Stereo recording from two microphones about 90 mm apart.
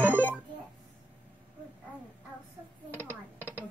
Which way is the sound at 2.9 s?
20° left (ahead or behind).